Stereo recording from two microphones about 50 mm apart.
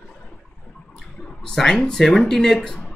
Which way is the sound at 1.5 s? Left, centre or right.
Centre.